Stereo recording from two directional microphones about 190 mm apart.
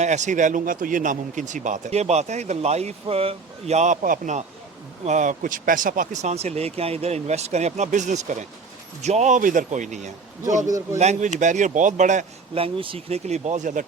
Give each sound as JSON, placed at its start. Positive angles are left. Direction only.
{"t": 0.0, "sound": "speech", "side_deg": -40}